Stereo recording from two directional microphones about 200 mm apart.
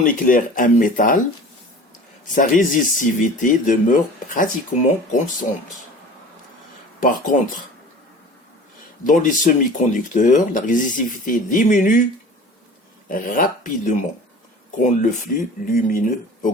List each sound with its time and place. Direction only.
0.0 s speech: 40° left (ahead or behind)
2.3 s speech: 40° left (ahead or behind)
7.0 s speech: 40° left (ahead or behind)
9.0 s speech: 40° left (ahead or behind)
13.1 s speech: 45° left (ahead or behind)
15.0 s speech: 45° left (ahead or behind)